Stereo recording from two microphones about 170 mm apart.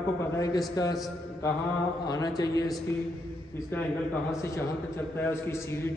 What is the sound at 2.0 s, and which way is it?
A man's voice, 20° left (ahead or behind).